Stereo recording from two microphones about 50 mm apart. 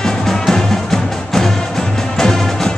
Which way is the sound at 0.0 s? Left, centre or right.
Centre.